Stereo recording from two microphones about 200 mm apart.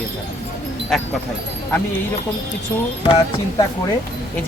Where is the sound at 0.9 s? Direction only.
5° left (ahead or behind).